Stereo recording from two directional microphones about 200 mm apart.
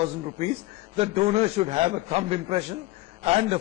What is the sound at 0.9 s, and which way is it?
A man's voice, 30° right (ahead or behind).